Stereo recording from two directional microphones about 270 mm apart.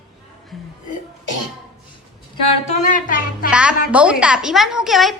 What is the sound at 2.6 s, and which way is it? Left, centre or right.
Speech, left.